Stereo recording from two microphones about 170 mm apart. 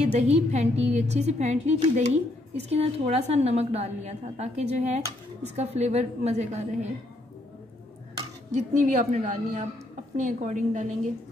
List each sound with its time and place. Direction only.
0.0 s a woman's voice: 40° right (ahead or behind)
8.2 s a woman's voice: 40° right (ahead or behind)